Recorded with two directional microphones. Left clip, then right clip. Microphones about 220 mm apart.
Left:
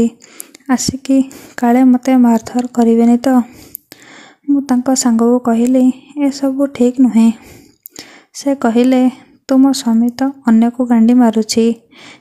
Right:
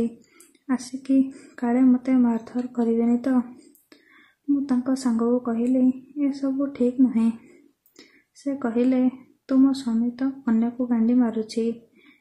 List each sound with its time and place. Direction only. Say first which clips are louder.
0.7 s a woman's voice: left 11 dB; 45° left (ahead or behind)
4.6 s a woman's voice: left 11 dB; 45° left (ahead or behind)